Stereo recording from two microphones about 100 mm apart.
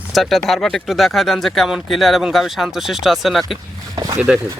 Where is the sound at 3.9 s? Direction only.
40° right (ahead or behind).